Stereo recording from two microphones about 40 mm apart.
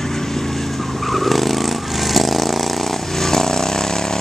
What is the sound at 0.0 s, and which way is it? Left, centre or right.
Vehicle, centre.